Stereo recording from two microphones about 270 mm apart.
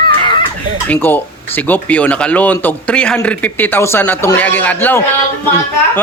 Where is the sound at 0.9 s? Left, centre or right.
Centre.